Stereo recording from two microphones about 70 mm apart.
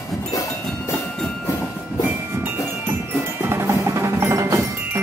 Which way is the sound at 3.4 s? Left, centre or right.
Right.